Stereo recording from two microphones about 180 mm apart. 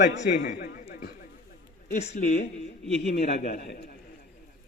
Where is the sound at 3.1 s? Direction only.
60° left (ahead or behind).